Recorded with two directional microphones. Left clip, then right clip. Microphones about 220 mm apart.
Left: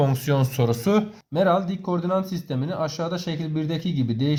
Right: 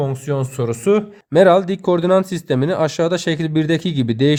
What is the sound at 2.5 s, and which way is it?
Speech, 40° right (ahead or behind).